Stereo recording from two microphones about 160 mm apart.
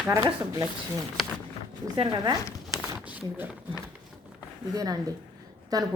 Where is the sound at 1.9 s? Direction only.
30° right (ahead or behind).